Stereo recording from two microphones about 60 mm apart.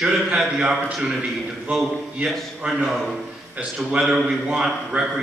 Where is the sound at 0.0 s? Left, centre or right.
Centre.